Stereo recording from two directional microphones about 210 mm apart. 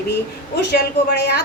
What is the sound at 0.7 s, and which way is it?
Speech, 50° left (ahead or behind).